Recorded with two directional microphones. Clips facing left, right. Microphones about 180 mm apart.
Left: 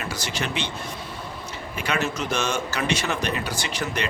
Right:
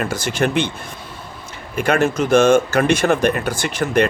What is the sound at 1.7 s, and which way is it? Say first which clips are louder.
Speech: right 10 dB; 50° right (ahead or behind).